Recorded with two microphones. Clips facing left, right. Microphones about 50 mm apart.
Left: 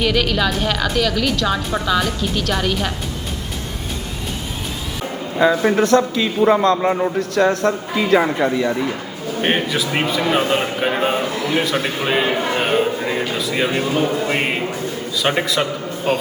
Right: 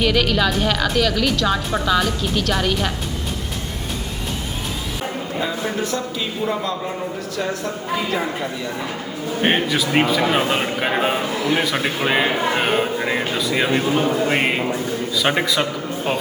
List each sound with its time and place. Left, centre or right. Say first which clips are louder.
0.0 s a woman's voice: even; centre
5.4 s a man's voice: left 10 dB; left
9.4 s a woman's voice: even; centre
13.3 s a woman's voice: even; centre